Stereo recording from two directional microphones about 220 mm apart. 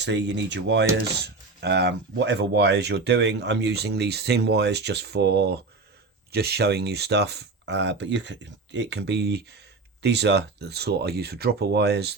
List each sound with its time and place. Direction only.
0.0 s speech: 50° right (ahead or behind)